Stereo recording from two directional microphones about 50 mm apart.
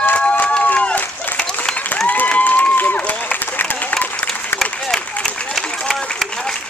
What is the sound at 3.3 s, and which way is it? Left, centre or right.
Applause, left.